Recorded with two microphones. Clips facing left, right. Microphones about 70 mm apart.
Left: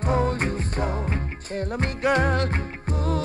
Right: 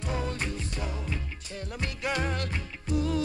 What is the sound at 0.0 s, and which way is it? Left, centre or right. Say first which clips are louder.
Music: left 9 dB; left.